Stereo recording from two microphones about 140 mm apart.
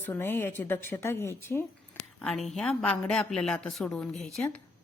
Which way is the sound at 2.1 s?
5° left (ahead or behind).